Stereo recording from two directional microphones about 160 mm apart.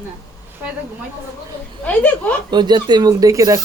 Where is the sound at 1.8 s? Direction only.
10° left (ahead or behind).